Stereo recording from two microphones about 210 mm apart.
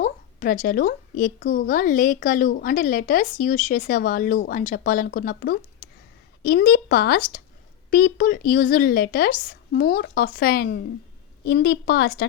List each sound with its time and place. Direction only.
0.0 s a woman's voice: 40° left (ahead or behind)